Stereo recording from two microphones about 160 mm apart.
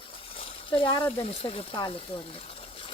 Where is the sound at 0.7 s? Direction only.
30° left (ahead or behind).